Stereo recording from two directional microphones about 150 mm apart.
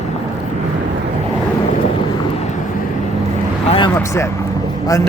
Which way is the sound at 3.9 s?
20° left (ahead or behind).